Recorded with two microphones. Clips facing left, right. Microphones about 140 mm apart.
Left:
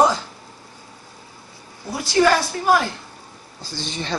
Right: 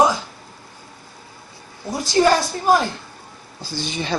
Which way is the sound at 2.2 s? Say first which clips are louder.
Even; 30° right (ahead or behind).